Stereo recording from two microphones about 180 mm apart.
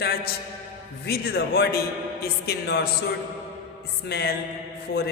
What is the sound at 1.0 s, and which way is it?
A woman's voice, 60° left (ahead or behind).